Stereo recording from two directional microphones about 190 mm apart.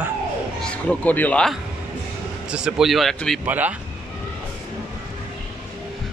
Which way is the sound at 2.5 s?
5° right (ahead or behind).